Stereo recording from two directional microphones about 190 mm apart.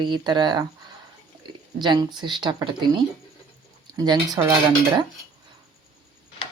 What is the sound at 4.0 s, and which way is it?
Speech, 20° right (ahead or behind).